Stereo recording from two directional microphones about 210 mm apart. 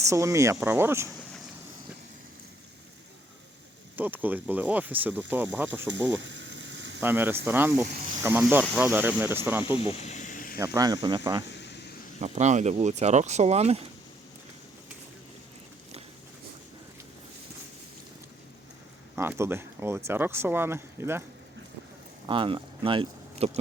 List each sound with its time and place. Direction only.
0.0 s speech: 15° right (ahead or behind)
3.9 s speech: 10° right (ahead or behind)
5.9 s frying: 60° right (ahead or behind)
7.0 s speech: 10° right (ahead or behind)
10.0 s a sound: 35° left (ahead or behind)
10.6 s speech: 15° right (ahead or behind)
11.5 s a sound: 55° left (ahead or behind)
12.2 s speech: 30° right (ahead or behind)
19.1 s speech: 10° right (ahead or behind)
22.3 s speech: 25° right (ahead or behind)